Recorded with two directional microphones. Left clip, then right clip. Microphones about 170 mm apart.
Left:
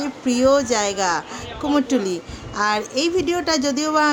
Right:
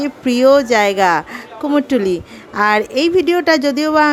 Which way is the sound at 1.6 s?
30° right (ahead or behind).